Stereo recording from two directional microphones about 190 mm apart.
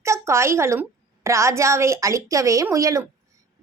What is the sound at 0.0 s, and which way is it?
A woman's voice, 15° right (ahead or behind).